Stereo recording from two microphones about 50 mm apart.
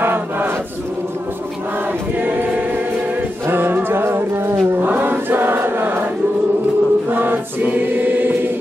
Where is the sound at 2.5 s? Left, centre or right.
Right.